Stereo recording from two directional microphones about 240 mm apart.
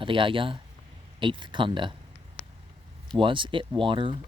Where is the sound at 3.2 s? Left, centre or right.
Right.